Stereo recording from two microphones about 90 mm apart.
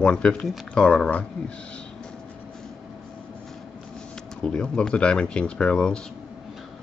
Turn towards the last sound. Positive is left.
turn(degrees=10)  # may be behind; listen again after turning